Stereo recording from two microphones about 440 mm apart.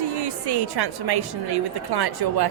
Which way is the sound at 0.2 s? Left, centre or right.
Right.